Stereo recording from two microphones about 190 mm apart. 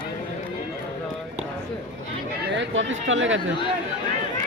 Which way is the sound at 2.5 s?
85° right.